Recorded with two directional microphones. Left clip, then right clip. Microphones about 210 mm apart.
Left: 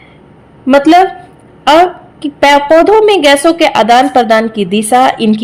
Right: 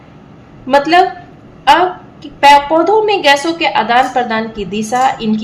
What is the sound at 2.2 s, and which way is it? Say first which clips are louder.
A woman's voice: even; 50° left (ahead or behind).